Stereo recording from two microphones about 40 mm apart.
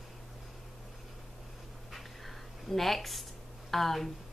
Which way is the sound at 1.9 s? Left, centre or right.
Centre.